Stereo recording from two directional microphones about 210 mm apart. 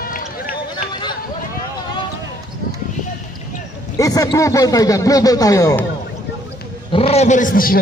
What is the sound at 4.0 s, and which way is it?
Speech, 15° left (ahead or behind).